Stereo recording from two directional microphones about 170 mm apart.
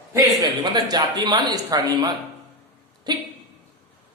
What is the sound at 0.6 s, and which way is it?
Speech, 25° right (ahead or behind).